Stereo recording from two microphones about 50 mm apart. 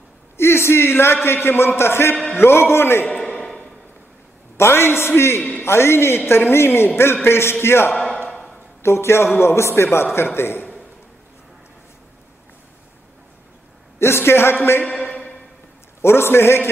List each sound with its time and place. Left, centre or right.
0.4 s a man's voice: left
4.6 s a man's voice: left
8.3 s a sound: centre
8.8 s a man's voice: left
13.9 s a man's voice: left
16.0 s speech: left